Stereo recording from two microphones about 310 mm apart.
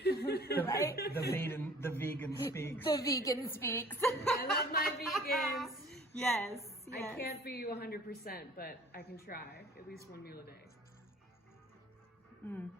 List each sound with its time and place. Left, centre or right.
0.0 s chuckle: left
0.6 s a sound: centre
1.3 s speech: centre
4.4 s a woman's voice: left
5.3 s child singing: centre
6.6 s a sound: centre
7.2 s a woman's voice: left
12.4 s speech: centre